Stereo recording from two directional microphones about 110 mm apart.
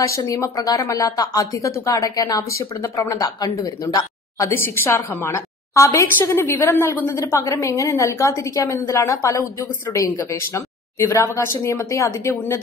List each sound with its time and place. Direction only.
0.0 s speech: 30° left (ahead or behind)